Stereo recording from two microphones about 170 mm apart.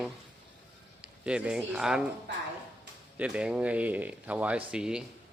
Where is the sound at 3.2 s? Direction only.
5° right (ahead or behind).